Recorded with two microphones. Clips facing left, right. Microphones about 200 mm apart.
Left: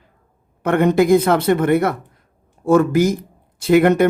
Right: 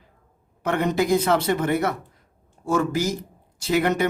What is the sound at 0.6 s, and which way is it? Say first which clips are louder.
Speech: left 7 dB; 55° left (ahead or behind).